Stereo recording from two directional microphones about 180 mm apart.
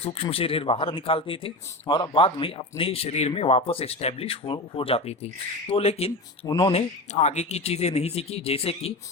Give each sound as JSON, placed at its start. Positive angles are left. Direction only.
{"t": 0.0, "sound": "speech", "side_deg": 35}
{"t": 6.4, "sound": "speech", "side_deg": 25}